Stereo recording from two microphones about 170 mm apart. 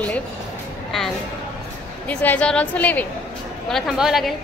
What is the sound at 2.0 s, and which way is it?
A woman's voice, 10° left (ahead or behind).